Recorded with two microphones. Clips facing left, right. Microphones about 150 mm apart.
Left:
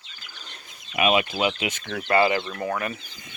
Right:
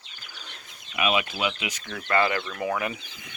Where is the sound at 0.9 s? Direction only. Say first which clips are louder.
Left 4 dB; 20° left (ahead or behind).